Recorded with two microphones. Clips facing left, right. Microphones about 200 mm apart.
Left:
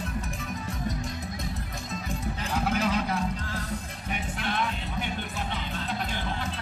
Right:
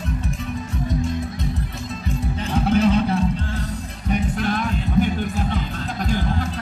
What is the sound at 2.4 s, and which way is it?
Music, 30° right (ahead or behind).